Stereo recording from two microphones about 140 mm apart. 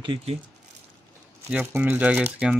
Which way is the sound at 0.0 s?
40° right (ahead or behind).